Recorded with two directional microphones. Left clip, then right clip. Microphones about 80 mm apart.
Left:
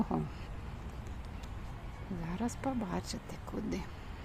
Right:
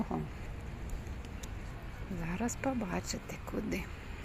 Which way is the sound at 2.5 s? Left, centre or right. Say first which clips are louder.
Right 1 dB; centre.